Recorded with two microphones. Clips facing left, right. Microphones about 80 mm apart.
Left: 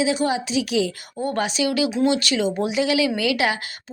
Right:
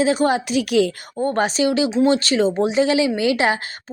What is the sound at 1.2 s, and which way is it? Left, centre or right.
Speech, right.